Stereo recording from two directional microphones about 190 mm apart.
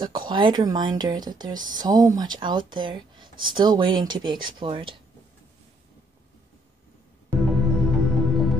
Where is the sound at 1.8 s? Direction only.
20° right (ahead or behind).